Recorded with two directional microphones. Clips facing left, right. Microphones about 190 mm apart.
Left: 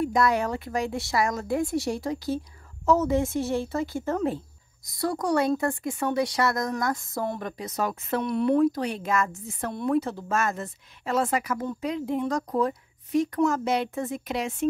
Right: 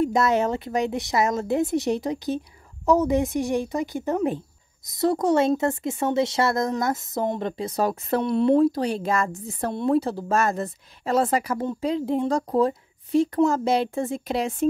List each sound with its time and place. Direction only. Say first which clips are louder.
0.0 s speech: right 3 dB; 25° right (ahead or behind)